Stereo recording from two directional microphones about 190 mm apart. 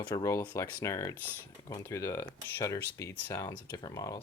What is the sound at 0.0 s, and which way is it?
Speech, 20° left (ahead or behind).